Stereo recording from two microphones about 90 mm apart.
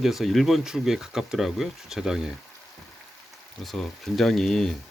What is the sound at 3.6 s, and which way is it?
Speech, 5° left (ahead or behind).